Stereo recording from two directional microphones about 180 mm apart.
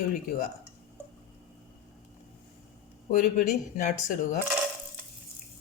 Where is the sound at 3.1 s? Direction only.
45° left (ahead or behind).